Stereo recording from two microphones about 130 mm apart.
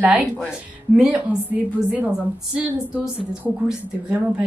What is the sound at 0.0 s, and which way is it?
A woman's voice, 10° right (ahead or behind).